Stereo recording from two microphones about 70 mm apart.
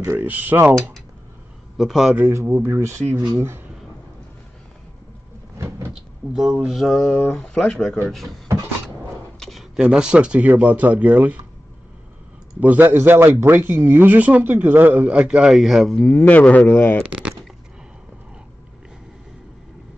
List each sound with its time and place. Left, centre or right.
0.2 s a man's voice: right
1.8 s speech: centre
2.4 s speech: right
6.3 s speech: centre
9.4 s a man's voice: centre; by 11.4 s right
12.5 s speech: right
12.8 s a man's voice: right; by 15.5 s centre
15.5 s speech: centre
16.1 s speech: left
17.0 s speech: centre